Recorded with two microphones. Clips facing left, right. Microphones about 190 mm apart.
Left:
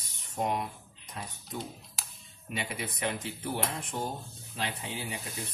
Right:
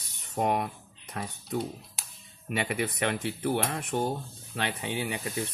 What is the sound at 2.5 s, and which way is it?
Speech, 65° right (ahead or behind).